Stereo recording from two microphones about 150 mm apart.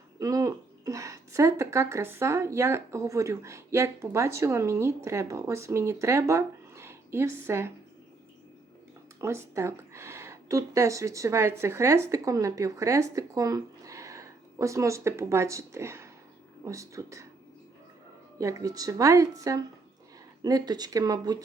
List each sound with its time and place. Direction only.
0.2 s a woman's voice: 20° right (ahead or behind)
9.2 s speech: 20° right (ahead or behind)
18.3 s speech: 20° right (ahead or behind)